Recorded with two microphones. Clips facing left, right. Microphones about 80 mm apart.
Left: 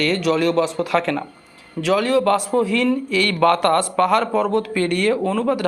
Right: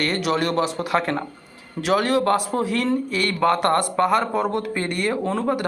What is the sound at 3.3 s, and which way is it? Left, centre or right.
Speech, centre.